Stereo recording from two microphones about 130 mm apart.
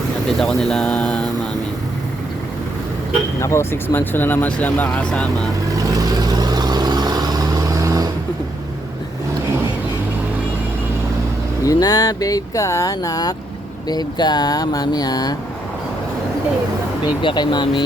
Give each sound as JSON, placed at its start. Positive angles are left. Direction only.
{"t": 0.3, "sound": "speech", "side_deg": 5}
{"t": 3.4, "sound": "speech", "side_deg": 20}
{"t": 5.6, "sound": "vehicle", "side_deg": -25}
{"t": 11.6, "sound": "speech", "side_deg": 30}
{"t": 13.8, "sound": "a sound", "side_deg": 30}
{"t": 17.2, "sound": "a sound", "side_deg": 35}